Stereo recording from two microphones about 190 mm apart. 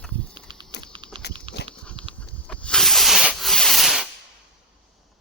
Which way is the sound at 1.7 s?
5° left (ahead or behind).